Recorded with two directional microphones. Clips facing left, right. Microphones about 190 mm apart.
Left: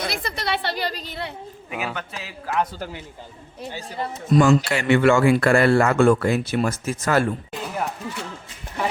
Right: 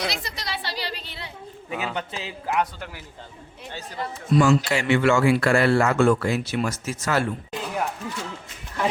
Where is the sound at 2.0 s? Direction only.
20° right (ahead or behind).